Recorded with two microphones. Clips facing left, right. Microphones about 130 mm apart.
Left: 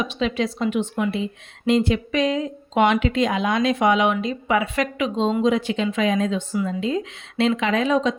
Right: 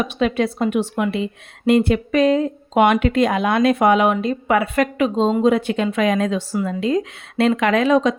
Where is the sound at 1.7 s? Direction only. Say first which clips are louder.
Right 4 dB; 55° right (ahead or behind); by 5.4 s 40° right (ahead or behind).